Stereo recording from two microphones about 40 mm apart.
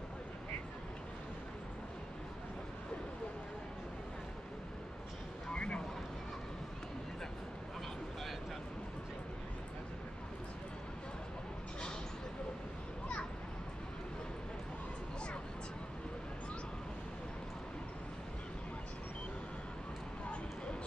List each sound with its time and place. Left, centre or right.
5.5 s vehicle: left